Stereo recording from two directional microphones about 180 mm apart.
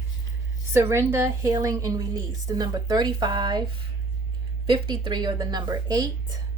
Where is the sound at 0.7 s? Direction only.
15° right (ahead or behind).